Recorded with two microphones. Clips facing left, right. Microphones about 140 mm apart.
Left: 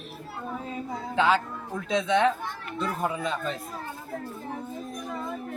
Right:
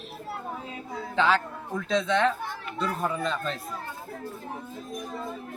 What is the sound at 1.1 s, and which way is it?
A man's voice, 10° left (ahead or behind).